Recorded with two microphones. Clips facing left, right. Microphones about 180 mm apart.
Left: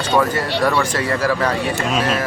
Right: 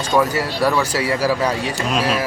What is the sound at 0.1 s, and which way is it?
Speech, 10° right (ahead or behind).